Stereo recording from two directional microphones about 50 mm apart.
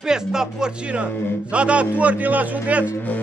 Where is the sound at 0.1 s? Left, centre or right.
Centre.